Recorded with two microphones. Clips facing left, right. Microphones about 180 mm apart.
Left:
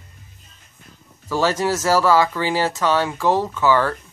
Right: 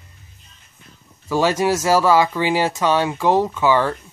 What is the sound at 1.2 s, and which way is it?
Speech, 15° right (ahead or behind).